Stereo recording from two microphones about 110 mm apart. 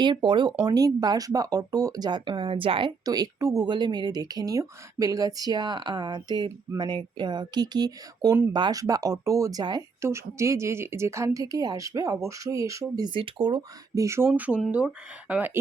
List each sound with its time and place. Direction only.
0.0 s speech: 45° right (ahead or behind)
0.6 s speech: 35° right (ahead or behind); by 2.9 s 55° right (ahead or behind)
3.0 s speech: 35° right (ahead or behind)
10.0 s speech: 25° right (ahead or behind)
13.1 s speech: 50° right (ahead or behind); by 14.3 s 25° right (ahead or behind)
14.3 s speech: 15° right (ahead or behind)